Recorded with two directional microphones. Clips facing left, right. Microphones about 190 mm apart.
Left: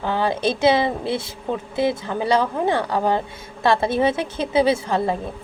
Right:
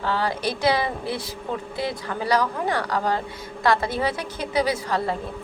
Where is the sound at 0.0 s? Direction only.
20° left (ahead or behind).